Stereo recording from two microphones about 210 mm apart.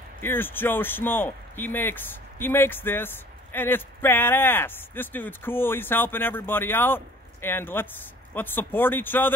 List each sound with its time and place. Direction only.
0.2 s speech: 10° left (ahead or behind)